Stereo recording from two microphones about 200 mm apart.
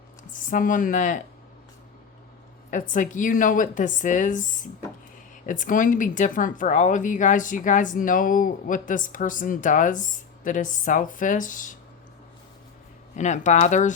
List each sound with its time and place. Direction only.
0.3 s speech: 40° left (ahead or behind)
2.6 s speech: 40° left (ahead or behind)
13.1 s speech: 35° left (ahead or behind)